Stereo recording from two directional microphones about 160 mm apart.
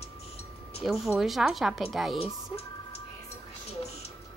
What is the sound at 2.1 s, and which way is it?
Speech, 35° left (ahead or behind).